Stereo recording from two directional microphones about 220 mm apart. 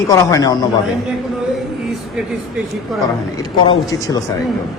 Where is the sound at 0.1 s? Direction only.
15° left (ahead or behind).